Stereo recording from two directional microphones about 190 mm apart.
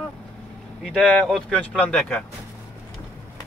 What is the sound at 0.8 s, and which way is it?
Speech, centre (ahead or behind).